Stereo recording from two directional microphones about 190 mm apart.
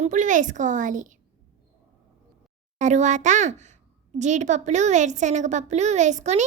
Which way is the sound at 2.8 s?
40° right (ahead or behind).